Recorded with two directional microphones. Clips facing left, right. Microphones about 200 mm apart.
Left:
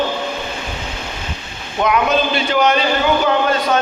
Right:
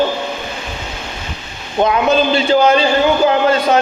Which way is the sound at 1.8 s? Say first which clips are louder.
Right 3 dB; 30° right (ahead or behind).